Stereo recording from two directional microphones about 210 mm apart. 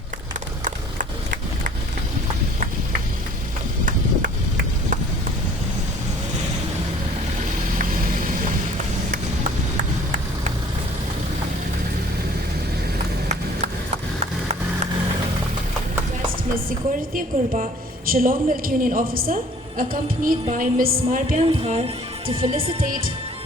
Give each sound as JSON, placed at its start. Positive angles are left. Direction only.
{"t": 3.8, "sound": "run", "side_deg": -40}
{"t": 17.2, "sound": "a woman's voice", "side_deg": -40}
{"t": 21.4, "sound": "speech", "side_deg": -25}